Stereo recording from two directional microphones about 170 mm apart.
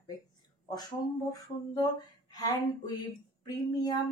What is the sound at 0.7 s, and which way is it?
A woman's voice, 20° left (ahead or behind).